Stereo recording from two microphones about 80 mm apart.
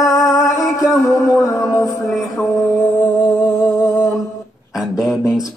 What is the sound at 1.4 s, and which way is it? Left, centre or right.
Music, left.